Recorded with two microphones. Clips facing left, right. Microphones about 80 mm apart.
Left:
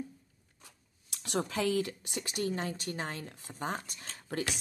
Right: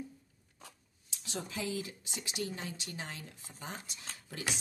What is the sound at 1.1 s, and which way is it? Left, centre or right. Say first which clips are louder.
Speech: left 7 dB; left.